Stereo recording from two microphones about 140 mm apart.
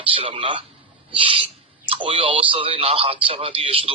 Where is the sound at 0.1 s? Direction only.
40° right (ahead or behind).